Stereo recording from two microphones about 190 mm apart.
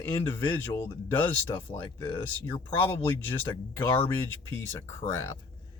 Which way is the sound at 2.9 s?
10° left (ahead or behind).